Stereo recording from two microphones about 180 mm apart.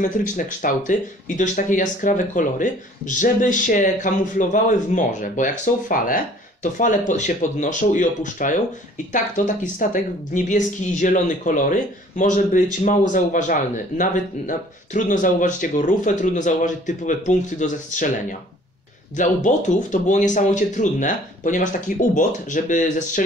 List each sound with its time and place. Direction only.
0.0 s speech: 45° left (ahead or behind)
19.1 s speech: 45° left (ahead or behind)